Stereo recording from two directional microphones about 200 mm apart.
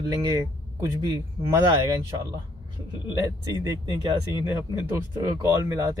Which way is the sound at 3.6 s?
20° right (ahead or behind).